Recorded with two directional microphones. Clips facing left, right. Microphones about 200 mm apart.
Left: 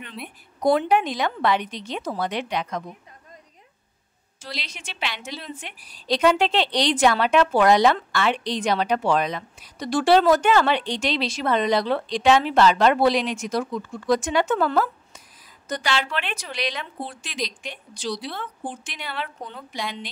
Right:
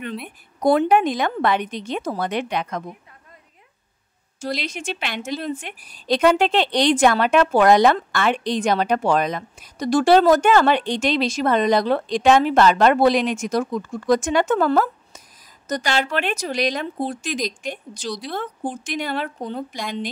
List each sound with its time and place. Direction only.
0.7 s a woman's voice: 50° right (ahead or behind)
4.4 s a woman's voice: 50° right (ahead or behind)